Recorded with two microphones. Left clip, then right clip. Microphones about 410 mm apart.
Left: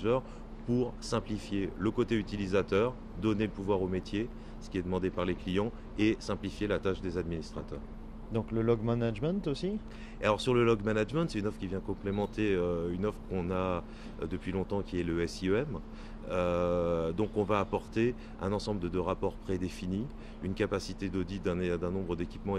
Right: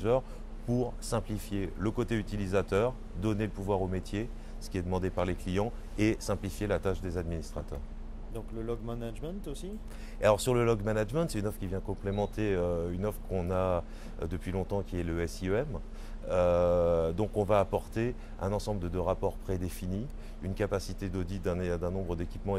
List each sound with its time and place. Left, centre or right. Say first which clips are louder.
0.7 s speech: even; centre
8.3 s speech: left 8 dB; left
10.2 s speech: right 2 dB; centre